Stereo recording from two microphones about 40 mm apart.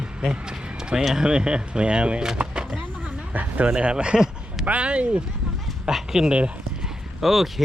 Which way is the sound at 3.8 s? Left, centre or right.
Right.